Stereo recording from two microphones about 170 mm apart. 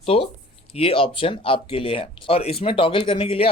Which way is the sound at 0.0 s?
35° left (ahead or behind).